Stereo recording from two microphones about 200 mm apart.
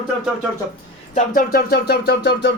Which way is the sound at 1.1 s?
40° left (ahead or behind).